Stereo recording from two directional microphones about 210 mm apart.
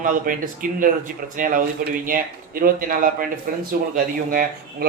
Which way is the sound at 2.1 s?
45° right (ahead or behind).